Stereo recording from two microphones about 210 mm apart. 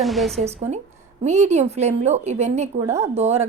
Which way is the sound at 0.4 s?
30° right (ahead or behind).